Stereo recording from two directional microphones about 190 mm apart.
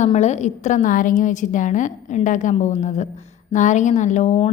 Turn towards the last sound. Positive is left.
turn(degrees=40)  # may be behind; listen again after turning